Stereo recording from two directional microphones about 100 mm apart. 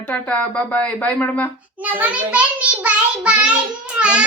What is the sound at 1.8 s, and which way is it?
A child's voice, 15° right (ahead or behind).